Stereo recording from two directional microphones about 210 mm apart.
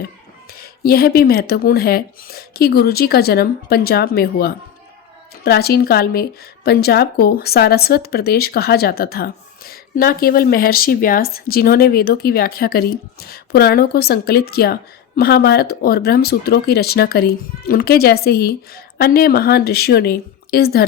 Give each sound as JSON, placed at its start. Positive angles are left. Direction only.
{"t": 0.6, "sound": "speech", "side_deg": 45}